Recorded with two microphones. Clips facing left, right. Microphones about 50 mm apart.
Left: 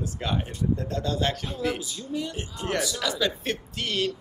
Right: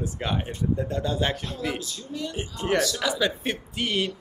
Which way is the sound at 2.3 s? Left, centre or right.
Right.